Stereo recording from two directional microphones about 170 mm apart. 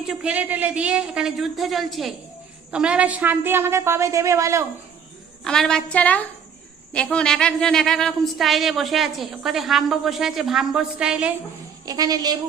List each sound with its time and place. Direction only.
0.1 s a woman's voice: 5° right (ahead or behind)
5.5 s a woman's voice: 5° left (ahead or behind)
11.9 s a woman's voice: 20° right (ahead or behind)